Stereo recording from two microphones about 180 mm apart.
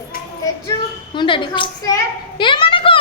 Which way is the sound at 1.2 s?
25° left (ahead or behind).